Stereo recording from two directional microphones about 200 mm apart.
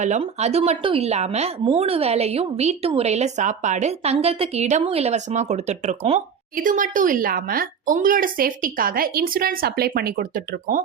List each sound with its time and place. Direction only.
0.0 s a woman's voice: 35° right (ahead or behind)